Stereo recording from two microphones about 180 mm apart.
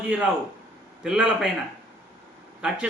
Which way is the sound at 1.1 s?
5° right (ahead or behind).